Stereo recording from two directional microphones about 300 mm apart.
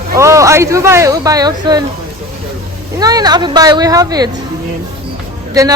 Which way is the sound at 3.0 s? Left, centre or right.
Centre.